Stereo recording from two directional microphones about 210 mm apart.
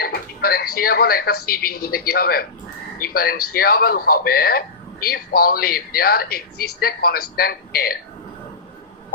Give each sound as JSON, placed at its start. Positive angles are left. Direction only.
{"t": 0.0, "sound": "television", "side_deg": 45}
{"t": 0.8, "sound": "a man's voice", "side_deg": 45}